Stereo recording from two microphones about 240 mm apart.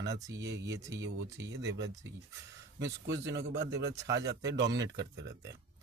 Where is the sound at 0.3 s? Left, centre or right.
Right.